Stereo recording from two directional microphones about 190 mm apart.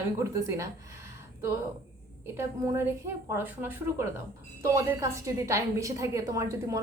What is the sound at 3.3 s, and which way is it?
A woman's voice, 10° right (ahead or behind).